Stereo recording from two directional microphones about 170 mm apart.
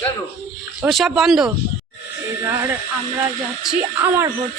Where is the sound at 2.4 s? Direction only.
15° right (ahead or behind).